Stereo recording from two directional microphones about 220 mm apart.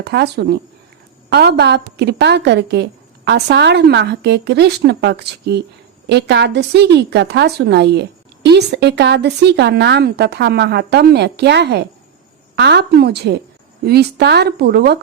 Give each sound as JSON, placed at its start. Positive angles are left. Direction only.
{"t": 0.0, "sound": "a woman's voice", "side_deg": -50}